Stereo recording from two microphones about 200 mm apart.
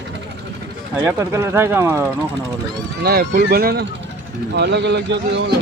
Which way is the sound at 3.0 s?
50° right (ahead or behind).